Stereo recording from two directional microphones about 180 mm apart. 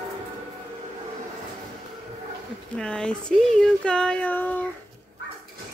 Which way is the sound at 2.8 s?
5° left (ahead or behind).